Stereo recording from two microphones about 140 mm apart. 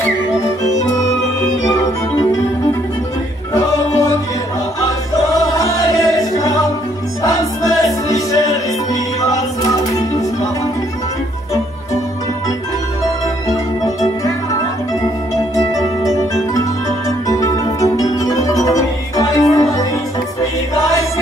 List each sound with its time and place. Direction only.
1.6 s music: 25° left (ahead or behind)
3.5 s music: 20° left (ahead or behind)
5.4 s music: 25° left (ahead or behind)
17.3 s music: 25° left (ahead or behind)